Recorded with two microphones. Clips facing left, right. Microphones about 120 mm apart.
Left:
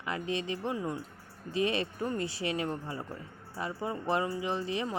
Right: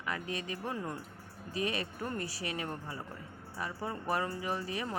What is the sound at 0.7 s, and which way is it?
Speech, 15° left (ahead or behind).